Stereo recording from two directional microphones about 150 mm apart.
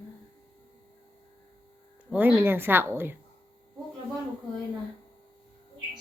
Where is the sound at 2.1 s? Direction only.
10° right (ahead or behind).